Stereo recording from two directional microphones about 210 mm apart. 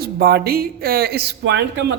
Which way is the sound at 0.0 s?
50° right (ahead or behind).